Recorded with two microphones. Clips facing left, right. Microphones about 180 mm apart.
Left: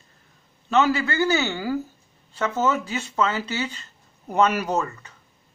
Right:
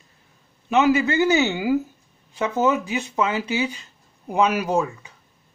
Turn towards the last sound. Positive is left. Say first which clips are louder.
# right 3 dB
turn(degrees=-10)  # may be behind; listen again after turning